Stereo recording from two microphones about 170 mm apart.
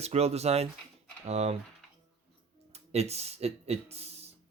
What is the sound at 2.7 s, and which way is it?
Speech, 40° right (ahead or behind).